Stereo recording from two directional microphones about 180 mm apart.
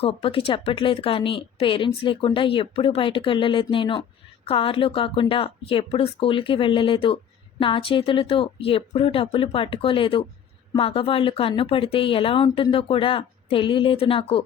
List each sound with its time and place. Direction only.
0.0 s speech: 30° left (ahead or behind)